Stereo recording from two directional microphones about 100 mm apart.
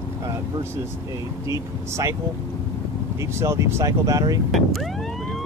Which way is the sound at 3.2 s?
25° right (ahead or behind).